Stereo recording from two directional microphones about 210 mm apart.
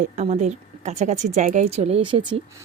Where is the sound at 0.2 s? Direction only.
35° right (ahead or behind).